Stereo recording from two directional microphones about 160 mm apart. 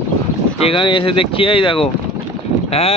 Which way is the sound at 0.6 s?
35° left (ahead or behind).